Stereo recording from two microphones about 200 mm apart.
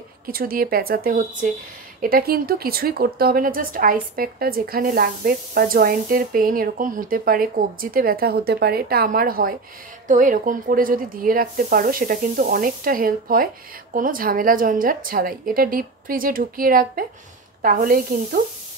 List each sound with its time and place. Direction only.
0.3 s a woman's voice: 45° right (ahead or behind)